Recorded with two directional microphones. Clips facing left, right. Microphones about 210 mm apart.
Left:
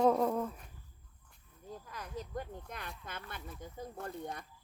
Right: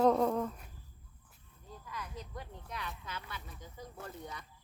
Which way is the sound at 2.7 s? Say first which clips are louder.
Right 2 dB; 50° left (ahead or behind).